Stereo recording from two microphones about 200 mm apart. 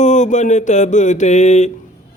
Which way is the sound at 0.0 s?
35° left (ahead or behind).